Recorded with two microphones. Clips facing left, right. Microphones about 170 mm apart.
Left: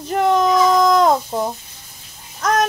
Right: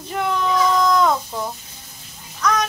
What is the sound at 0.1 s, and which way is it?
Baby cry, 40° left (ahead or behind).